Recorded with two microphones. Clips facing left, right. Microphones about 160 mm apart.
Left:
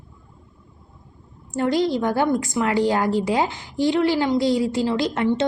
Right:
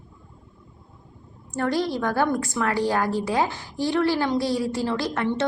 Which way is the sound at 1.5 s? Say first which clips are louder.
Left 4 dB; 20° left (ahead or behind).